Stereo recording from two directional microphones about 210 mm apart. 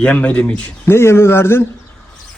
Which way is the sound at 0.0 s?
5° left (ahead or behind).